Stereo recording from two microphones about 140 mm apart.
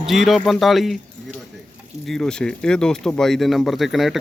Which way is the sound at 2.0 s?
5° left (ahead or behind).